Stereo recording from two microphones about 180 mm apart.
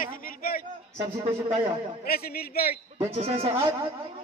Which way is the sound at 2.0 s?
60° left (ahead or behind).